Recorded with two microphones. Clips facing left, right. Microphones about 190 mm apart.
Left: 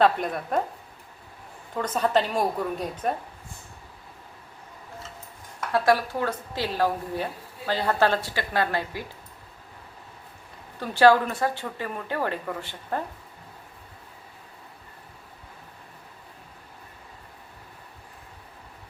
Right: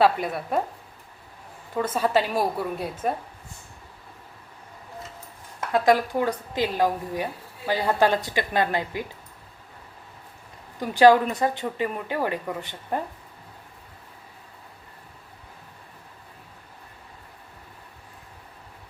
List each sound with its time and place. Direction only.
0.0 s speech: 5° right (ahead or behind)
1.7 s a woman's voice: 5° right (ahead or behind)
5.7 s a woman's voice: 15° right (ahead or behind)
10.8 s a woman's voice: 15° right (ahead or behind)